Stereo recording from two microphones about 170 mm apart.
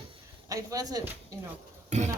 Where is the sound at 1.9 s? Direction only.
45° right (ahead or behind).